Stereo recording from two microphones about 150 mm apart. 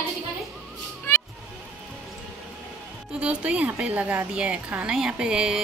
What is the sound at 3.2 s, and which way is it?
A woman's voice, 10° right (ahead or behind).